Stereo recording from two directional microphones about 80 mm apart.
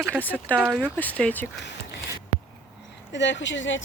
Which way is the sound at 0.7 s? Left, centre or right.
Centre.